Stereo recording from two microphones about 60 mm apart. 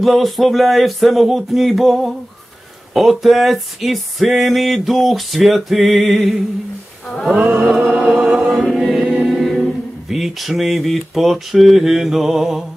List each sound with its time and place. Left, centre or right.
0.0 s a sound: centre
7.3 s music: right
8.7 s choir: centre
9.3 s speech: centre